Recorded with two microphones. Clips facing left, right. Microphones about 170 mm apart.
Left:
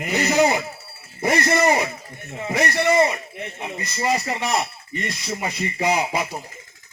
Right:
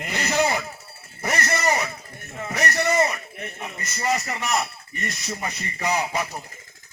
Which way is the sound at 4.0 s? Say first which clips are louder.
Left 3 dB; 30° left (ahead or behind).